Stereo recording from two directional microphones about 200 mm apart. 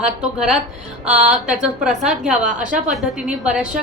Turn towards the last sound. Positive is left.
turn(degrees=-5)  # may be behind; listen again after turning